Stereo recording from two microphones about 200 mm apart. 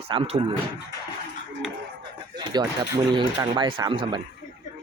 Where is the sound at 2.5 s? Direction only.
20° right (ahead or behind).